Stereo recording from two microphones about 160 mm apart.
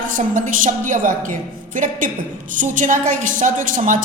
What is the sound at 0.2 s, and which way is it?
A woman's voice, 55° right (ahead or behind).